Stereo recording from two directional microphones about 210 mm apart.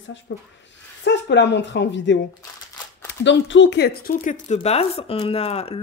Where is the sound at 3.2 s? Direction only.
60° left (ahead or behind); by 5.8 s 30° left (ahead or behind).